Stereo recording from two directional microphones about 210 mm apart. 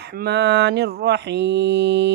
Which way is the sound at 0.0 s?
50° right (ahead or behind).